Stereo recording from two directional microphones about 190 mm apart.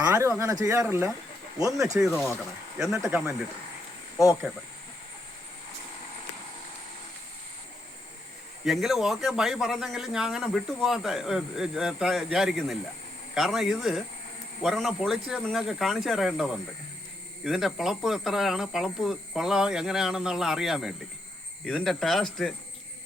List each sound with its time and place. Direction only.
0.0 s speech: 10° right (ahead or behind)
3.0 s speech: 10° right (ahead or behind)
8.6 s speech: centre (ahead or behind)